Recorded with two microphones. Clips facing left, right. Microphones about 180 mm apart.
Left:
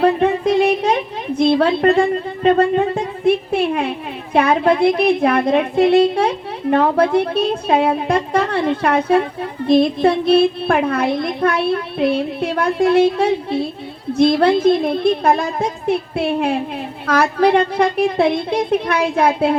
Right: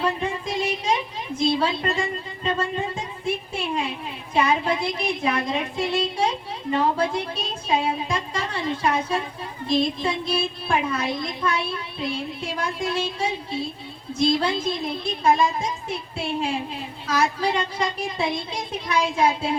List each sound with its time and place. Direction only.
0.0 s a woman's voice: 60° left (ahead or behind)